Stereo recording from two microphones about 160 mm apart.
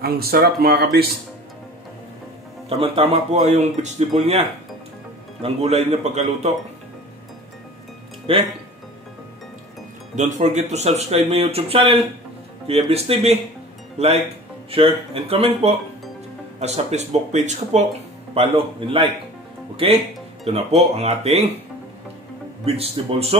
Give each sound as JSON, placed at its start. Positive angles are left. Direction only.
{"t": 0.0, "sound": "speech", "side_deg": -75}
{"t": 2.8, "sound": "speech", "side_deg": -40}
{"t": 5.4, "sound": "speech", "side_deg": -40}
{"t": 8.3, "sound": "speech", "side_deg": -35}
{"t": 10.1, "sound": "speech", "side_deg": -45}
{"t": 20.5, "sound": "speech", "side_deg": -40}
{"t": 22.7, "sound": "speech", "side_deg": -40}